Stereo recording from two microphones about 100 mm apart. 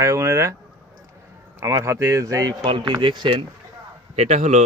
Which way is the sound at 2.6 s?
55° right (ahead or behind).